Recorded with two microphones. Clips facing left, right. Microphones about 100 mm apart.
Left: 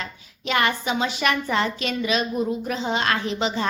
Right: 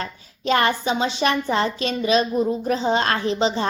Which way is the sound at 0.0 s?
35° right (ahead or behind).